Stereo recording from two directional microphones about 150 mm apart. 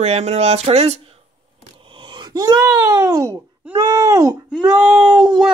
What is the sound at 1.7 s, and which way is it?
Wail, 35° right (ahead or behind).